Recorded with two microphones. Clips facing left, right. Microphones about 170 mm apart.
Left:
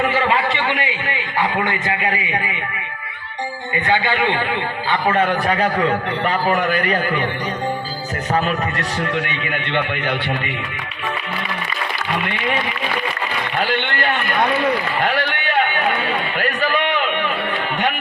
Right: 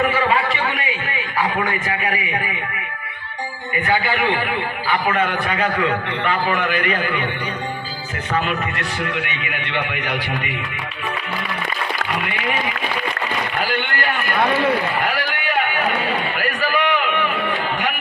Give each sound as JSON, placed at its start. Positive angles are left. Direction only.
{"t": 0.1, "sound": "a sound", "side_deg": 25}
{"t": 1.4, "sound": "a man's voice", "side_deg": 25}
{"t": 3.8, "sound": "a man's voice", "side_deg": 20}
{"t": 8.3, "sound": "a man's voice", "side_deg": 40}
{"t": 13.6, "sound": "a man's voice", "side_deg": 25}
{"t": 16.4, "sound": "a sound", "side_deg": 20}